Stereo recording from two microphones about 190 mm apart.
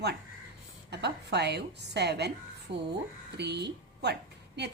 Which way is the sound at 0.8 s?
60° right (ahead or behind).